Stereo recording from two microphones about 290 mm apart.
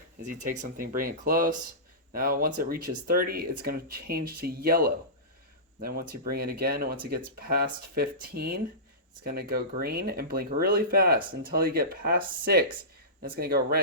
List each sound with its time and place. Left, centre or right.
0.2 s speech: right